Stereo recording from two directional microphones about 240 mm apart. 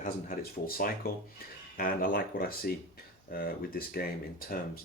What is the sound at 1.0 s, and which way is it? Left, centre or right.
Speech, left.